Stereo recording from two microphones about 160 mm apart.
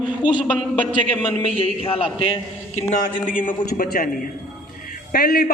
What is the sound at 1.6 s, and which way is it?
Speech, 35° left (ahead or behind).